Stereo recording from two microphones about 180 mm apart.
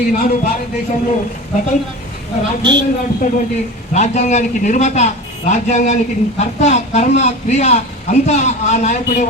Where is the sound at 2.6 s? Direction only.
25° right (ahead or behind).